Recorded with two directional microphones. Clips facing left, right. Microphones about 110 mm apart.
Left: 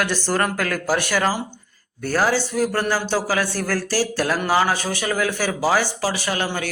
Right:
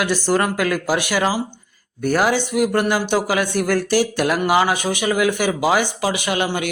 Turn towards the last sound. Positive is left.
turn(degrees=-15)  # may be behind; listen again after turning